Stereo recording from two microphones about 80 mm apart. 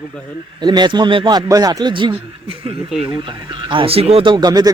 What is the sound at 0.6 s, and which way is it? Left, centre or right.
A man's voice, right.